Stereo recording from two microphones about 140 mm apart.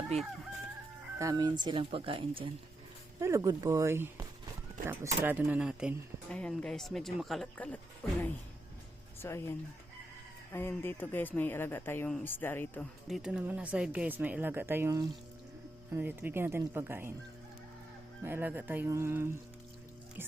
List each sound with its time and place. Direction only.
0.1 s chicken: 45° right (ahead or behind)
1.2 s speech: 25° right (ahead or behind)
3.2 s speech: 25° right (ahead or behind); by 5.9 s 10° right (ahead or behind)
6.3 s speech: 5° left (ahead or behind)
9.2 s speech: 20° left (ahead or behind)
12.8 s speech: centre (ahead or behind); by 17.1 s 15° right (ahead or behind)
18.2 s speech: 15° right (ahead or behind)